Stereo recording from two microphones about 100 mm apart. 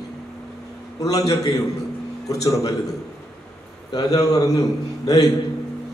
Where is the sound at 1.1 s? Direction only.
40° left (ahead or behind).